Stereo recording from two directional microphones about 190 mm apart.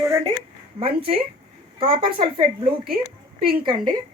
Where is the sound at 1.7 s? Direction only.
25° right (ahead or behind).